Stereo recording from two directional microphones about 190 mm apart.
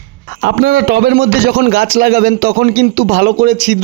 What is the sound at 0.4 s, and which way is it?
A man's voice, 65° right (ahead or behind).